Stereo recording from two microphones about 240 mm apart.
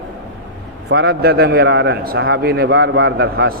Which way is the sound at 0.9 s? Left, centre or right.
Right.